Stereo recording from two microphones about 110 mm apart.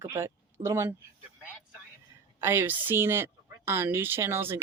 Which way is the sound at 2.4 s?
20° right (ahead or behind).